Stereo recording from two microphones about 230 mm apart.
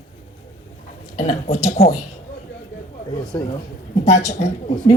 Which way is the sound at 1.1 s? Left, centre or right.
Left.